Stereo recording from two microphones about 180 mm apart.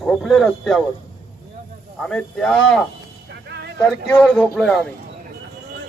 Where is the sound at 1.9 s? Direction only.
5° left (ahead or behind).